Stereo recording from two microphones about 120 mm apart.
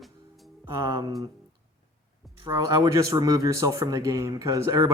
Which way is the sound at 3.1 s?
30° right (ahead or behind).